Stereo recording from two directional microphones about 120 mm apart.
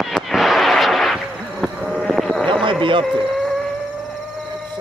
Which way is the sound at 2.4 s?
45° right (ahead or behind).